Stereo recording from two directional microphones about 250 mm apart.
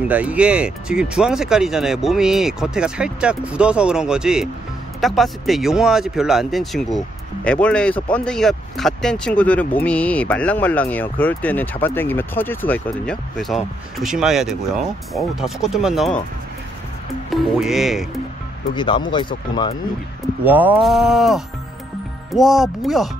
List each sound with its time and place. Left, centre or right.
0.1 s speech: centre
17.3 s speech: centre
18.8 s speech: centre
20.4 s speech: centre